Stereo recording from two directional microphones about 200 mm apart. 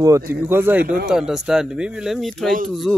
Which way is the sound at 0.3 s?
10° right (ahead or behind).